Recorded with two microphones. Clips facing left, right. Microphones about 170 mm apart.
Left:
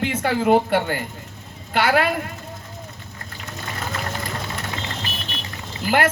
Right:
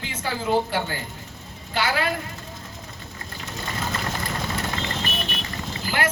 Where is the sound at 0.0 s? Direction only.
60° left (ahead or behind).